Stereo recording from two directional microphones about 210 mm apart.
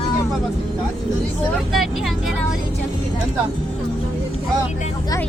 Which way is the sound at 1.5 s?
Centre (ahead or behind).